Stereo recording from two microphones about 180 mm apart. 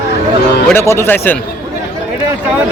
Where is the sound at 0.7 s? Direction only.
15° left (ahead or behind).